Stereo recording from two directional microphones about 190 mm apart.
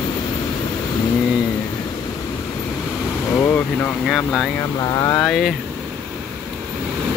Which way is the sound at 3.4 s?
10° left (ahead or behind).